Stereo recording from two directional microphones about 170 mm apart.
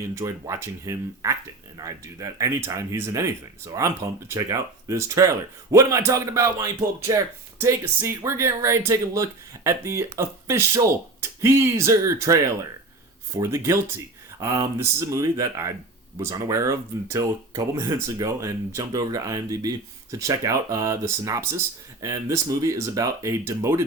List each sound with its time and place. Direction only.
0.1 s speech: 15° right (ahead or behind)